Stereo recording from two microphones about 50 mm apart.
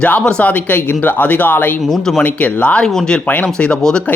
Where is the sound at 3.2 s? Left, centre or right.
Left.